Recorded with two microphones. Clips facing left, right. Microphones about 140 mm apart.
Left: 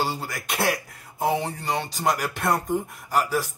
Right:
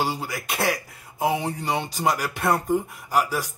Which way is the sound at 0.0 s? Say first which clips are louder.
Right 1 dB; 10° right (ahead or behind).